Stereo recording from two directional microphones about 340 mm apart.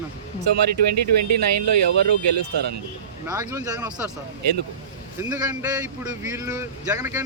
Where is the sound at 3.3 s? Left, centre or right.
Centre.